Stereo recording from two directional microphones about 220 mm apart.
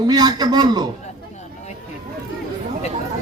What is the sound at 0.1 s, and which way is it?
Speech, 20° right (ahead or behind).